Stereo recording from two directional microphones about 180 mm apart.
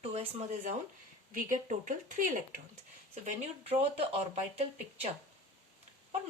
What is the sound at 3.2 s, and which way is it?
A woman's voice, 35° right (ahead or behind).